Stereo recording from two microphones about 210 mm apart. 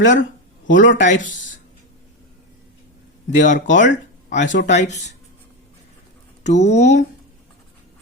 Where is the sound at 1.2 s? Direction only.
40° left (ahead or behind).